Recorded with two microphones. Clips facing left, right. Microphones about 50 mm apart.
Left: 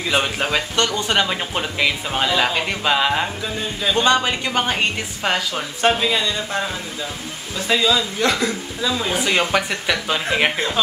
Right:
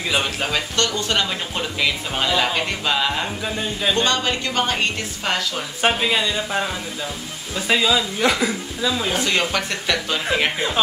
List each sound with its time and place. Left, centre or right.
0.1 s speech: centre
3.4 s a woman's voice: centre
3.9 s speech: centre
5.8 s a woman's voice: centre
9.1 s speech: centre